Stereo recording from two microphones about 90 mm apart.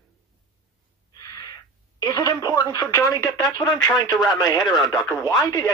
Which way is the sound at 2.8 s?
40° left (ahead or behind).